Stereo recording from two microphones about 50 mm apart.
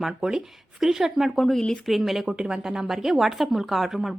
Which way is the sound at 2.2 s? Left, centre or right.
Centre.